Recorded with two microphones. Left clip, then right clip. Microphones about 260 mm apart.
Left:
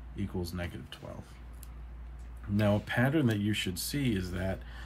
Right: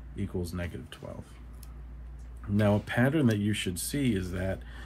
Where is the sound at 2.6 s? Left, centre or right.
Centre.